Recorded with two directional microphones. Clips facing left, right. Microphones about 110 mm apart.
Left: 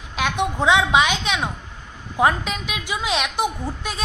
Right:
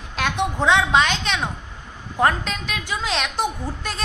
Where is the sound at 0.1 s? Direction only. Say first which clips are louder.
Left 1 dB; 5° left (ahead or behind).